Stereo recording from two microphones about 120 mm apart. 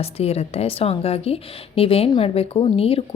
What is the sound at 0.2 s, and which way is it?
A woman's voice, 60° left (ahead or behind).